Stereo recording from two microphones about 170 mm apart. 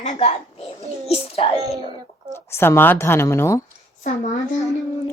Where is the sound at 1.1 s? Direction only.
35° left (ahead or behind).